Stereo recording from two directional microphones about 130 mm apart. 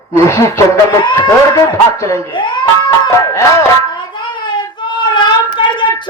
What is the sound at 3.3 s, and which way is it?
Speech, 20° left (ahead or behind).